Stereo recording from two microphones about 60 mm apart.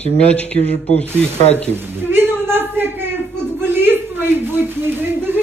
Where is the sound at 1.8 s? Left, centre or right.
Right.